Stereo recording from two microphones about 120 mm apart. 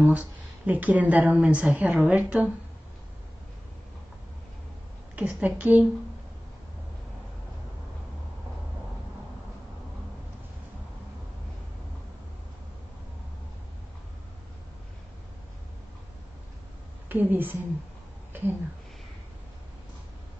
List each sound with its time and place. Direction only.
0.0 s a woman's voice: 10° right (ahead or behind)
5.1 s a woman's voice: 10° right (ahead or behind)
17.1 s a woman's voice: 15° right (ahead or behind)
18.3 s a sound: 15° right (ahead or behind)